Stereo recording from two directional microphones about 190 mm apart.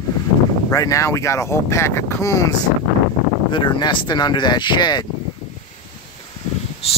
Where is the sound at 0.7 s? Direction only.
15° left (ahead or behind).